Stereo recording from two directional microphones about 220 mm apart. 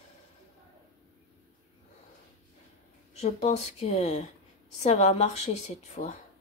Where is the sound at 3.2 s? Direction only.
30° left (ahead or behind).